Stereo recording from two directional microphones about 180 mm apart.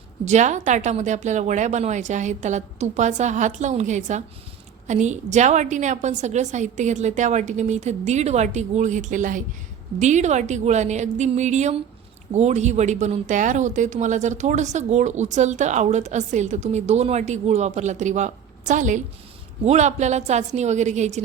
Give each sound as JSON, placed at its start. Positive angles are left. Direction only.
{"t": 0.3, "sound": "speech", "side_deg": -40}